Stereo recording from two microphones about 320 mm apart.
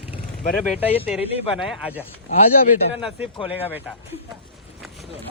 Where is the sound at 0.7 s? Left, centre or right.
Centre.